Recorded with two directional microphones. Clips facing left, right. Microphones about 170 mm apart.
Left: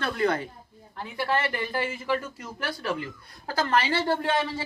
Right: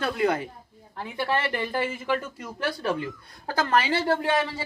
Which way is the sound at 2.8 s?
25° right (ahead or behind).